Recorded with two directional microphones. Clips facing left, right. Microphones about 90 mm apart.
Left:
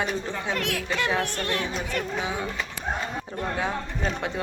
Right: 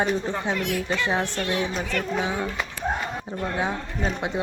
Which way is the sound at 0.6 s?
90° left.